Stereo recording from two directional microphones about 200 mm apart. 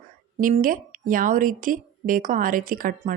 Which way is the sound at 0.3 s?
45° right (ahead or behind).